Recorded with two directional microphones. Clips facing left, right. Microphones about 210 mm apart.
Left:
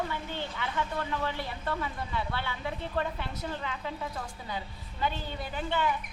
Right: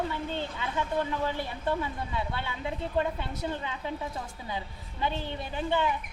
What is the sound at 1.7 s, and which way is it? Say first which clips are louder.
Speech: right 4 dB; 20° right (ahead or behind).